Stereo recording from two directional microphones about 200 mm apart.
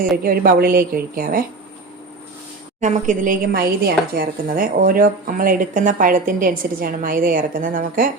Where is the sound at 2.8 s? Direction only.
40° right (ahead or behind).